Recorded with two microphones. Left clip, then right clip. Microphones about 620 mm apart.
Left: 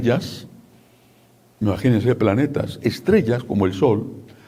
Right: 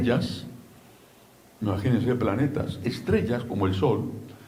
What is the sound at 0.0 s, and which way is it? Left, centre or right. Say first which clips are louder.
Speech: left 5 dB; left.